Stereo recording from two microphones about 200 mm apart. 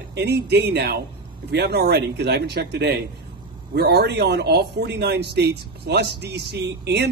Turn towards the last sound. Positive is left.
turn(degrees=-55)  # may be behind; listen again after turning